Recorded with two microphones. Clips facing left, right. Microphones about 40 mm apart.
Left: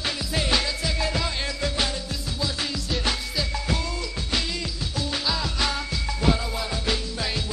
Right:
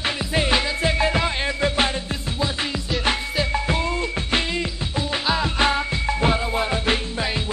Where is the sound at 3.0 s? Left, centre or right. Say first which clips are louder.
Right 8 dB; right.